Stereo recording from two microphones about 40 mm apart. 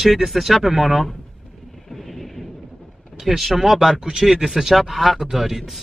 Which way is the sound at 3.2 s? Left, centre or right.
Centre.